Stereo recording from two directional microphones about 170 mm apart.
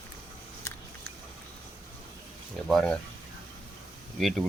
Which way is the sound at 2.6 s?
5° left (ahead or behind).